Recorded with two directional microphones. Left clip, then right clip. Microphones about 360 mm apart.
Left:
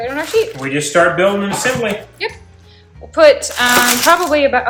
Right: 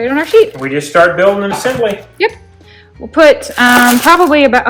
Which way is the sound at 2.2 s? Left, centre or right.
Right.